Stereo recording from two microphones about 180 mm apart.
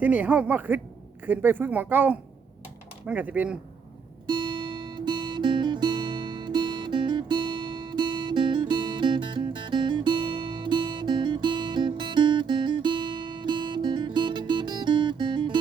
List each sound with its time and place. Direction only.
0.0 s speech: 10° right (ahead or behind)
4.3 s guitar: 25° right (ahead or behind)